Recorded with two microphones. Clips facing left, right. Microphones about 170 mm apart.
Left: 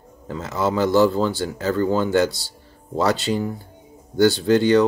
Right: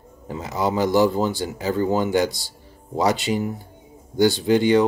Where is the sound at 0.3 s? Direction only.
15° right (ahead or behind).